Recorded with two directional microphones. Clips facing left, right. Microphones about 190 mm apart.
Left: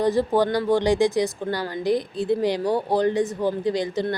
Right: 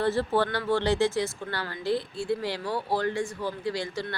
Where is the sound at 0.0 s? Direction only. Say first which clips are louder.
Left 5 dB; 15° left (ahead or behind).